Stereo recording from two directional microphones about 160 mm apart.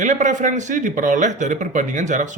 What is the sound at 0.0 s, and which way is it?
Speech, 50° right (ahead or behind).